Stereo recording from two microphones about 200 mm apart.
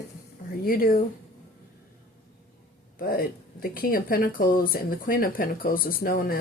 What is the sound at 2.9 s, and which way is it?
Speech, 45° left (ahead or behind).